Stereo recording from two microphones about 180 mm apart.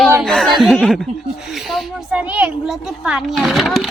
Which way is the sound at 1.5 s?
Centre (ahead or behind).